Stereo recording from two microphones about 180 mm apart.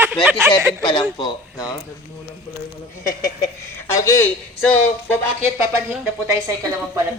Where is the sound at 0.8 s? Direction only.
25° left (ahead or behind).